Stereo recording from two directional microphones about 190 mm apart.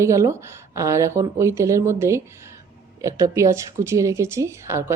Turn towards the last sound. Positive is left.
turn(degrees=-15)  # may be behind; listen again after turning